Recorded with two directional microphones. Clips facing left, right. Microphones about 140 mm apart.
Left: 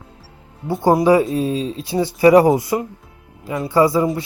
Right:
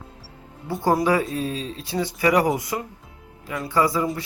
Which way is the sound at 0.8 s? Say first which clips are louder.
Left 7 dB; 25° left (ahead or behind).